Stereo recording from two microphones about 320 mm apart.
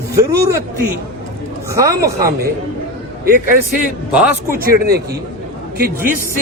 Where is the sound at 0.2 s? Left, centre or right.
Centre.